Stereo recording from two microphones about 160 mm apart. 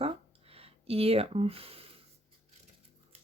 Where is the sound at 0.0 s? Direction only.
35° right (ahead or behind).